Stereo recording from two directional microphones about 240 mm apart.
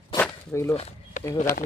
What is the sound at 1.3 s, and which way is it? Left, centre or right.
Speech, left.